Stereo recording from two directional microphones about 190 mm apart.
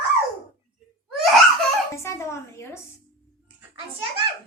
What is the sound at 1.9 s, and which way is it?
Speech, 15° left (ahead or behind).